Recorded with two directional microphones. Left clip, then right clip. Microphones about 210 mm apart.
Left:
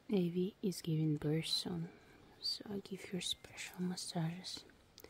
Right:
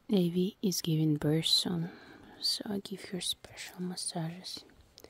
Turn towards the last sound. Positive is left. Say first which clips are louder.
# right 4 dB
turn(degrees=-10)  # may be behind; listen again after turning